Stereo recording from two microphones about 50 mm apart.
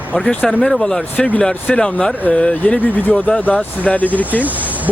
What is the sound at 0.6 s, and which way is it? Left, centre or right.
Speech, centre.